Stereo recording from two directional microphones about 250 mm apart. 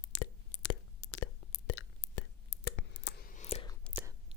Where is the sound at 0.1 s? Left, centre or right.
Left.